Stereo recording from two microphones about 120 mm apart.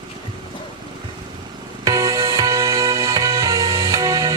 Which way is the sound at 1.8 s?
30° right (ahead or behind).